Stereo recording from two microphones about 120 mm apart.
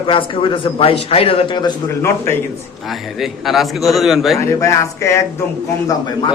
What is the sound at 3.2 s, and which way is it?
A man's voice, centre (ahead or behind).